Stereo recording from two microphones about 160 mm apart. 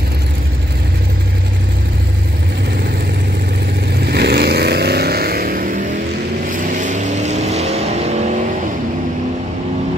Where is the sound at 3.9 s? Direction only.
85° right; by 8.2 s 40° right (ahead or behind).